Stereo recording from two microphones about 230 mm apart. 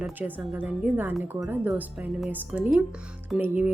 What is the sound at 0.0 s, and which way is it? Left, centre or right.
A woman's voice, centre.